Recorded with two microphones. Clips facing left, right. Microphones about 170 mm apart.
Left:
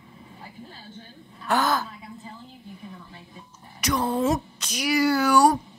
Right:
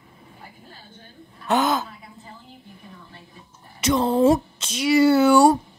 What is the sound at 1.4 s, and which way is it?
Speech, 20° right (ahead or behind).